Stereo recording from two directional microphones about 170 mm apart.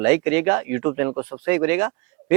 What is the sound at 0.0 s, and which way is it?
A man's voice, 10° right (ahead or behind).